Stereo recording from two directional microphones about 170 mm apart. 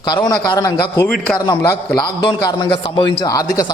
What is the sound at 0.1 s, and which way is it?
Speech, 25° left (ahead or behind).